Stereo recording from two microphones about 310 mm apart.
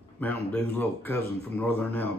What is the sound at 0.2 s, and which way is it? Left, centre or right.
Speech, centre.